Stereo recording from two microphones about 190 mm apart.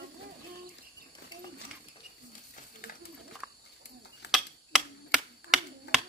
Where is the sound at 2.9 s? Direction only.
45° left (ahead or behind).